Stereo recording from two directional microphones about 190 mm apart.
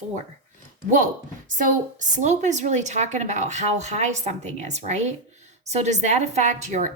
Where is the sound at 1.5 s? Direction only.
40° right (ahead or behind).